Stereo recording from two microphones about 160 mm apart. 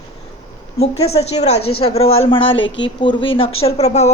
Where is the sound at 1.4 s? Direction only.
40° left (ahead or behind).